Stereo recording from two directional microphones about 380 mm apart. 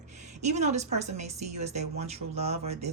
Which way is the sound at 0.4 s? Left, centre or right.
Centre.